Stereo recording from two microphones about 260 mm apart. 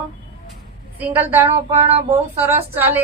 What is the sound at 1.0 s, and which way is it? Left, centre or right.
Speech, centre.